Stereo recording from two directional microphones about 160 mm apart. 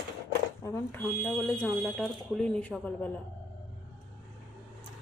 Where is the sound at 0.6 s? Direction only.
15° left (ahead or behind).